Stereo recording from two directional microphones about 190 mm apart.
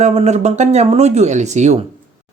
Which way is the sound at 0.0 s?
35° right (ahead or behind).